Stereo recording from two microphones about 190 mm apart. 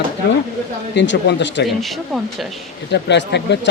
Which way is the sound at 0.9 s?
70° left (ahead or behind).